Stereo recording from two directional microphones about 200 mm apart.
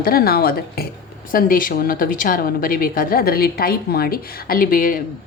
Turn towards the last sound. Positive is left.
turn(degrees=45)  # may be behind; listen again after turning